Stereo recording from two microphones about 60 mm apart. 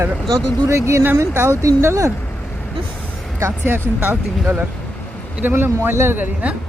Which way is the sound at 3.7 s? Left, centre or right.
Right.